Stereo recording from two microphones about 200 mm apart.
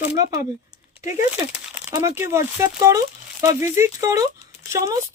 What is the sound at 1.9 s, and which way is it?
Speech, 15° right (ahead or behind).